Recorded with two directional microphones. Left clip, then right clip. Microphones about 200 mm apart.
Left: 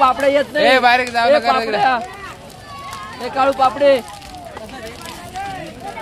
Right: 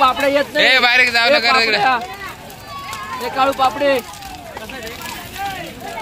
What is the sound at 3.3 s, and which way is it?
Speech, 55° left (ahead or behind).